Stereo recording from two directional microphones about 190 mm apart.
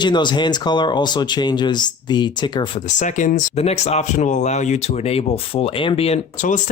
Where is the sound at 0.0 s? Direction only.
25° left (ahead or behind).